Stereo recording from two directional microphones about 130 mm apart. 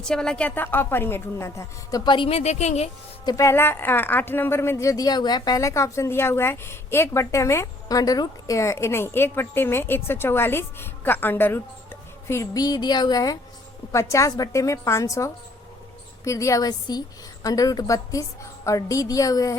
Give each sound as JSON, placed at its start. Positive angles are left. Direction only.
{"t": 0.0, "sound": "a woman's voice", "side_deg": 5}
{"t": 2.0, "sound": "a woman's voice", "side_deg": 40}
{"t": 3.2, "sound": "speech", "side_deg": 25}